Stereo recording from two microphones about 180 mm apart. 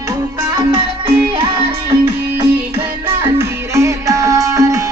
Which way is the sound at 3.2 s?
15° right (ahead or behind).